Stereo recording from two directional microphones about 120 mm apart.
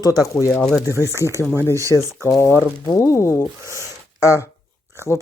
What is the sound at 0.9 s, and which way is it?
Speech, 25° right (ahead or behind).